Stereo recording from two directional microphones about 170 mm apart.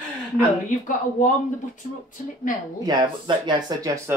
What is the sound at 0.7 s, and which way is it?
Speech, 50° left (ahead or behind).